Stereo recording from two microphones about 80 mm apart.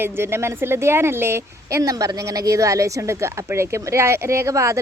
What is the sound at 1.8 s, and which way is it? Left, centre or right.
A woman's voice, right.